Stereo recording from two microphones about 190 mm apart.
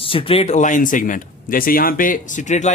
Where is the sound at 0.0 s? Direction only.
30° left (ahead or behind).